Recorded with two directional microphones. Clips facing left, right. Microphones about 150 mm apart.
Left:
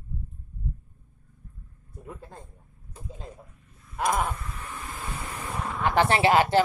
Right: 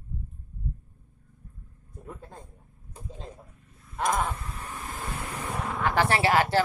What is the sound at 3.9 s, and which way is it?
Wild animals, 5° left (ahead or behind).